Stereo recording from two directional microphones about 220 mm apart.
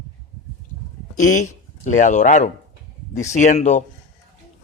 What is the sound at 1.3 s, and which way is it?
A man's voice, 35° left (ahead or behind).